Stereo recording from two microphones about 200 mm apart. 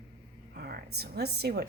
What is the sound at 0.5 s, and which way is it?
Speech, 55° right (ahead or behind).